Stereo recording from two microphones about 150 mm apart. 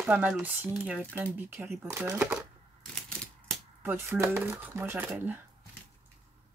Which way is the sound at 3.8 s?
15° right (ahead or behind).